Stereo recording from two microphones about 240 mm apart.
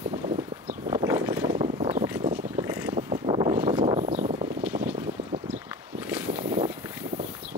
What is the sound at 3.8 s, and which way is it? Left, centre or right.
Vehicle, right.